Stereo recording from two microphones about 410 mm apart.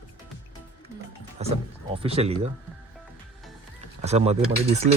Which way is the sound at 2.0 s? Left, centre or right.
Centre.